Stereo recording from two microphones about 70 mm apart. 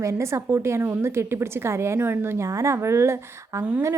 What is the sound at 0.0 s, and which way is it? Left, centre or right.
A woman's voice, right.